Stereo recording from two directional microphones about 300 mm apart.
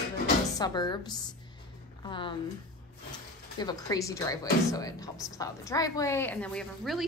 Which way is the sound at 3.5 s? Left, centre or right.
Centre.